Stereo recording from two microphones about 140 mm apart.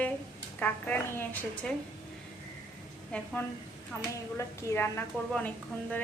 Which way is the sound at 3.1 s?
10° left (ahead or behind).